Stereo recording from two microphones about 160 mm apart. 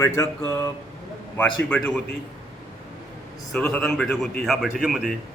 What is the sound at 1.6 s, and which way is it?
Speech, 10° left (ahead or behind).